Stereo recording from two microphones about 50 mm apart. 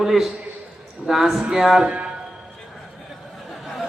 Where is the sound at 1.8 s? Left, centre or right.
Right.